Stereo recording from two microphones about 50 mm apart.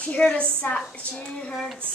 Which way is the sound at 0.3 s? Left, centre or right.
Left.